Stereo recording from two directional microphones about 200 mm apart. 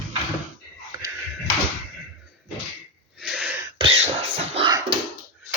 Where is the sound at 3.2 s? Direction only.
Centre (ahead or behind).